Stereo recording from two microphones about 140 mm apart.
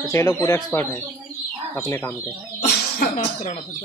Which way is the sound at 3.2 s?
50° left (ahead or behind).